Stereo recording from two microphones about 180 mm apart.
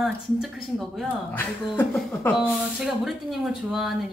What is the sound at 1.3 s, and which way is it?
Speech, 10° left (ahead or behind).